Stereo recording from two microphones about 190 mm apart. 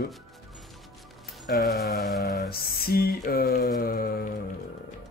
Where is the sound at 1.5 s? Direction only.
60° left (ahead or behind).